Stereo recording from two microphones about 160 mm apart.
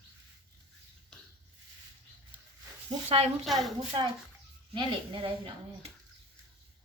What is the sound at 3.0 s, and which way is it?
Speech, 40° right (ahead or behind).